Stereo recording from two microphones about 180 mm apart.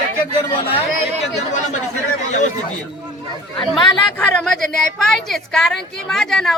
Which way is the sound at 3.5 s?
5° left (ahead or behind).